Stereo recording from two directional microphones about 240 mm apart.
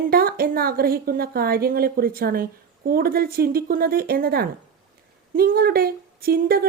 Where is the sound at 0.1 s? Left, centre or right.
Right.